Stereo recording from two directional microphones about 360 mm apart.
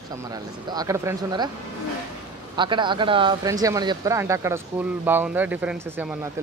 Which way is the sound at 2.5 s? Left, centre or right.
Centre.